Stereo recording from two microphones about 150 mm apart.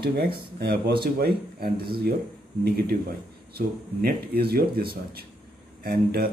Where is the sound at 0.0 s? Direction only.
90° right.